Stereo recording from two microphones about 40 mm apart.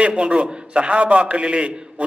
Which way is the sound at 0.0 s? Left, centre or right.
Right.